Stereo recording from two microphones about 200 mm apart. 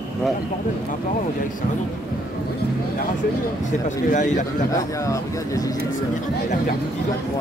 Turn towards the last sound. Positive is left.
turn(degrees=15)  # may be behind; listen again after turning